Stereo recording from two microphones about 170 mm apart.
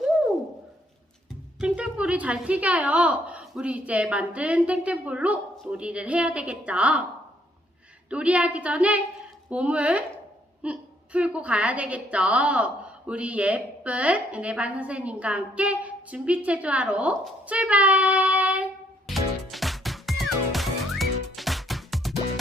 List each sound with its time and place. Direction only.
1.6 s a woman's voice: 5° right (ahead or behind)
8.1 s a woman's voice: 5° right (ahead or behind)
10.6 s a sound: 5° right (ahead or behind)